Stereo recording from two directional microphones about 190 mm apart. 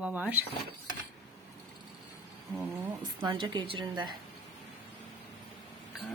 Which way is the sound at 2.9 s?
25° right (ahead or behind).